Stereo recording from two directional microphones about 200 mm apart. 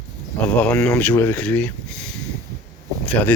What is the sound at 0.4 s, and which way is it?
Speech, 10° left (ahead or behind).